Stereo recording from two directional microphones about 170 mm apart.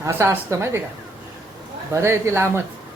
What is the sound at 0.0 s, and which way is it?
Speech, 15° right (ahead or behind).